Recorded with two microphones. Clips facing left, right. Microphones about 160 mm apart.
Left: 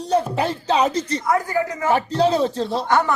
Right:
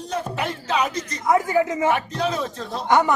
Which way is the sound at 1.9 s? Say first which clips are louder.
Left 5 dB; 30° left (ahead or behind).